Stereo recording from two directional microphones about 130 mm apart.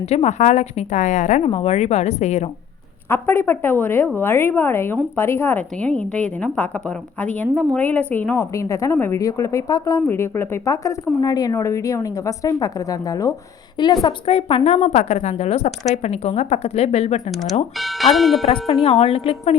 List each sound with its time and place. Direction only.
0.0 s a woman's voice: 55° left (ahead or behind)
1.5 s a woman's voice: 55° left (ahead or behind)
3.1 s a woman's voice: 15° left (ahead or behind)
8.4 s a woman's voice: 25° left (ahead or behind)
14.3 s a woman's voice: 50° left (ahead or behind)
17.7 s speech: centre (ahead or behind)
18.8 s a woman's voice: 50° left (ahead or behind)